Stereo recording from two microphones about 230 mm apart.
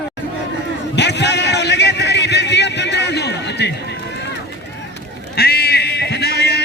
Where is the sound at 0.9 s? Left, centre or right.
Left.